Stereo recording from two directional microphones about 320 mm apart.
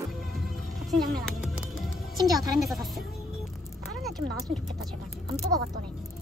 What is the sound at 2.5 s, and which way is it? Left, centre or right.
Speech, centre.